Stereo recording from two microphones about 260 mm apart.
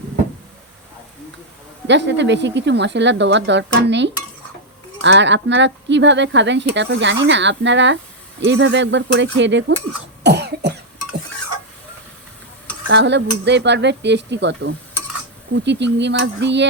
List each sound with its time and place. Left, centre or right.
1.9 s speech: right
10.2 s cough: right
12.9 s speech: right